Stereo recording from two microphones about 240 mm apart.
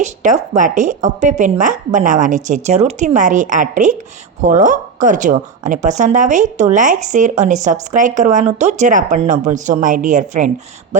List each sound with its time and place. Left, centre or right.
0.0 s a woman's voice: right